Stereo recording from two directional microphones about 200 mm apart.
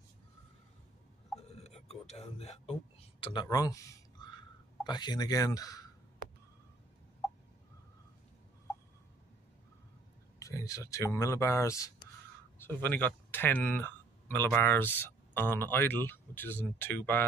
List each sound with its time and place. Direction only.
1.5 s a sound: 30° left (ahead or behind)
4.8 s speech: 20° left (ahead or behind)
10.4 s speech: 15° left (ahead or behind)